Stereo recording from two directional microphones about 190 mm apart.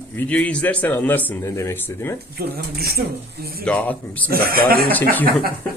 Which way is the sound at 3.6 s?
10° left (ahead or behind).